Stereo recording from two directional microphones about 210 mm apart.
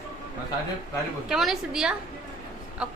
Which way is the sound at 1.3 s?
Centre (ahead or behind).